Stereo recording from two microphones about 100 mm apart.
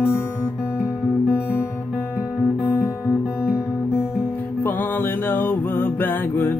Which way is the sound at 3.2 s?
10° right (ahead or behind).